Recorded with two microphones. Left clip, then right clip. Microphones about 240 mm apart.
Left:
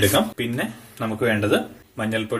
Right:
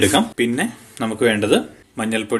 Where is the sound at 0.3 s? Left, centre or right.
Right.